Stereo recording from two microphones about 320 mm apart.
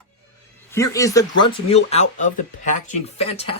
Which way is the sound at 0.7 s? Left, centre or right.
Centre.